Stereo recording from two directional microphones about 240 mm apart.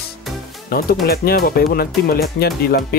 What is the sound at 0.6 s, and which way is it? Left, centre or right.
Speech, left.